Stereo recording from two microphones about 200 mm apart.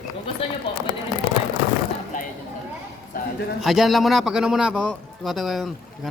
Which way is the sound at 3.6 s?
Centre (ahead or behind).